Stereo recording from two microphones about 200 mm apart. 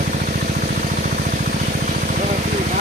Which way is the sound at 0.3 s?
45° right (ahead or behind).